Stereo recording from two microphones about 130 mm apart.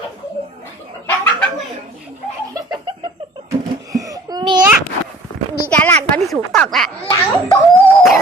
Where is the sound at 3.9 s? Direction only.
30° right (ahead or behind).